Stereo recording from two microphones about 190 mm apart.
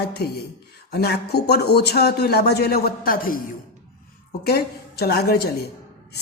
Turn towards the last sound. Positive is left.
turn(degrees=55)  # may be behind; listen again after turning